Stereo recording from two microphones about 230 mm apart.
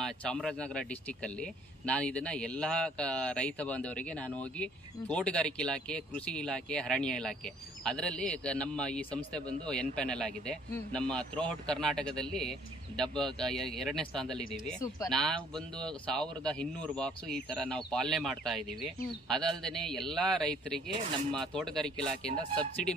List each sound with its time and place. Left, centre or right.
0.0 s speech: centre